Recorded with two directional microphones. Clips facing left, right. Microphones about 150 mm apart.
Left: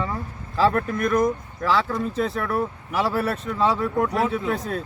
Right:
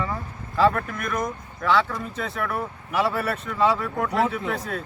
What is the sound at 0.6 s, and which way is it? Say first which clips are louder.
Speech: left 1 dB; 25° left (ahead or behind).